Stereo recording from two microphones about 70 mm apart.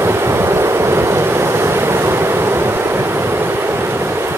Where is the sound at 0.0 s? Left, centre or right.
Right.